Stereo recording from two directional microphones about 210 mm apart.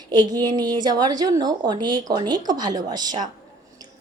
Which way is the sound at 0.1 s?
20° right (ahead or behind).